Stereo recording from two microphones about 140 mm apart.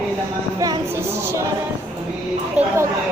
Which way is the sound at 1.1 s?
15° right (ahead or behind).